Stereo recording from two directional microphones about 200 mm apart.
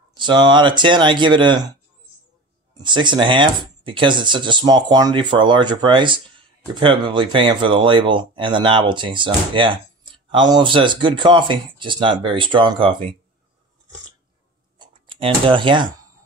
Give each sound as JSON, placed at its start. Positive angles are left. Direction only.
{"t": 0.1, "sound": "speech", "side_deg": -20}
{"t": 2.8, "sound": "speech", "side_deg": -25}
{"t": 14.8, "sound": "speech", "side_deg": -25}